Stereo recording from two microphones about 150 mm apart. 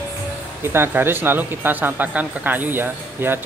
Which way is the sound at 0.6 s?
15° right (ahead or behind).